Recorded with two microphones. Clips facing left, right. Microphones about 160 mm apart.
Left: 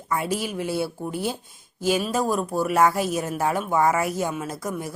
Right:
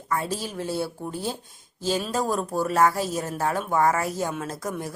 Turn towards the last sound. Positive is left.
turn(degrees=10)  # may be behind; listen again after turning